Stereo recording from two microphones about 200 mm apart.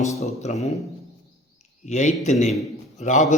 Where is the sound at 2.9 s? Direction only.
35° left (ahead or behind).